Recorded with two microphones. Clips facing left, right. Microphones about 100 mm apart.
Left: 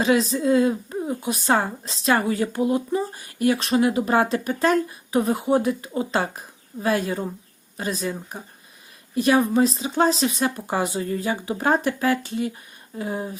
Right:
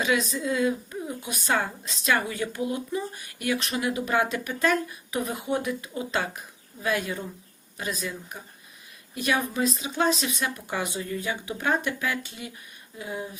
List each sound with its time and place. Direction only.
0.0 s speech: 35° left (ahead or behind)